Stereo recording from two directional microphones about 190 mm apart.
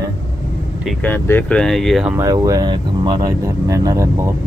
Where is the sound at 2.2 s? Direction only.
15° right (ahead or behind).